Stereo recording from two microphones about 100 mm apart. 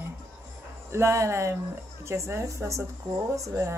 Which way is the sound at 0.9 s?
30° right (ahead or behind).